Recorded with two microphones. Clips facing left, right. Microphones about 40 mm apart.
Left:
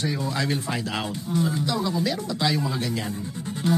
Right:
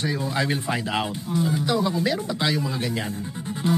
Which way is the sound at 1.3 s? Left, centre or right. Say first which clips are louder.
Even; centre.